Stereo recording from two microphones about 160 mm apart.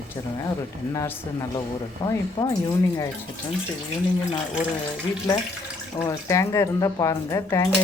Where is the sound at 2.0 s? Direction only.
25° left (ahead or behind).